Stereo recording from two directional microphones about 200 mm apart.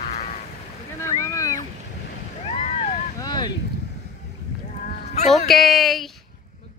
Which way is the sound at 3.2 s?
20° left (ahead or behind).